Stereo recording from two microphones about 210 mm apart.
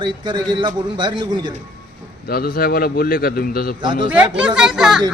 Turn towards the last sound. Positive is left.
turn(degrees=0)  # may be behind; listen again after turning